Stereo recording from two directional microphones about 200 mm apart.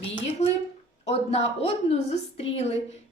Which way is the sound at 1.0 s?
30° left (ahead or behind).